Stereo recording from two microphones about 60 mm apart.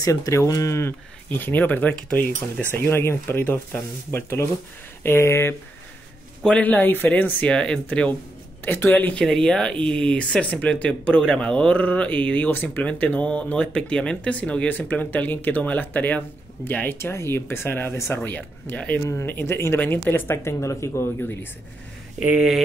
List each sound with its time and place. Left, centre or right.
0.0 s speech: left
1.4 s speech: left
5.0 s speech: left
6.5 s speech: left
7.4 s speech: centre
8.6 s speech: left
8.9 s speech: left
9.2 s speech: centre; by 16.9 s left
17.0 s speech: left
17.9 s speech: left
18.2 s speech: left
19.2 s speech: left